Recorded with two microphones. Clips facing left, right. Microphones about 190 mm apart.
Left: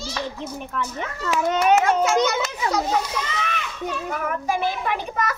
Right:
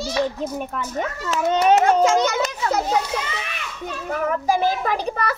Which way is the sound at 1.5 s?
30° right (ahead or behind).